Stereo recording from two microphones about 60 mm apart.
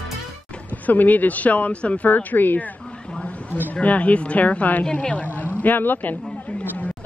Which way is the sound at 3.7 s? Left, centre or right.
Left.